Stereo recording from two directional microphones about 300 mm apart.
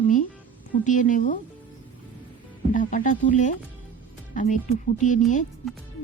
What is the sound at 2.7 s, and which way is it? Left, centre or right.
Speech, left.